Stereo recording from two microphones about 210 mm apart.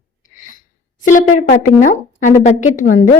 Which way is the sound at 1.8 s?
35° left (ahead or behind).